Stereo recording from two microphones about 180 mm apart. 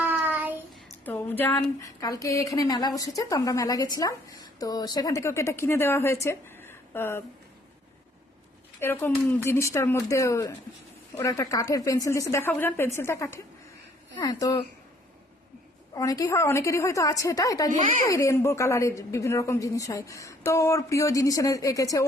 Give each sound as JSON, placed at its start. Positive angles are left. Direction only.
{"t": 0.0, "sound": "child singing", "side_deg": -10}
{"t": 1.0, "sound": "a woman's voice", "side_deg": 10}
{"t": 6.2, "sound": "a sound", "side_deg": 15}
{"t": 8.8, "sound": "a woman's voice", "side_deg": 10}
{"t": 16.0, "sound": "a woman's voice", "side_deg": 20}